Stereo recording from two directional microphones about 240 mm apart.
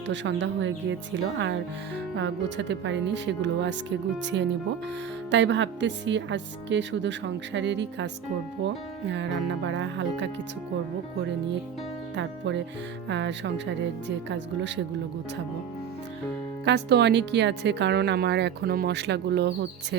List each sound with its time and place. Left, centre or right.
0.1 s speech: right
12.1 s speech: right
16.6 s speech: right